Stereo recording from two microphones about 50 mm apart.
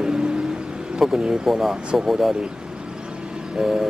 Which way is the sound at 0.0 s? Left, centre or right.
Centre.